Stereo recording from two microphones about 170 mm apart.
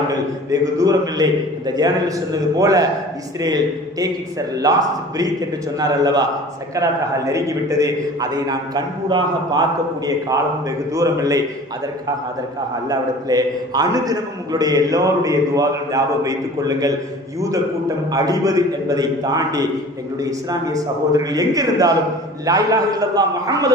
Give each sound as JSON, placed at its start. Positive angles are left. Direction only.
{"t": 0.1, "sound": "a man's voice", "side_deg": -20}
{"t": 4.0, "sound": "a man's voice", "side_deg": -20}
{"t": 12.9, "sound": "a man's voice", "side_deg": -25}